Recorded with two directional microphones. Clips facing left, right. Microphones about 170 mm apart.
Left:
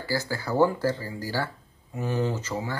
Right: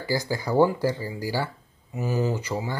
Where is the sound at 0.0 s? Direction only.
15° right (ahead or behind).